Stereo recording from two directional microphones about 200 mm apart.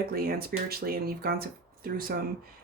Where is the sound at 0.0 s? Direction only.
50° right (ahead or behind).